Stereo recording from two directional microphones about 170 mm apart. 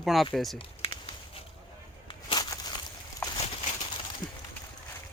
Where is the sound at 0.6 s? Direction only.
35° left (ahead or behind).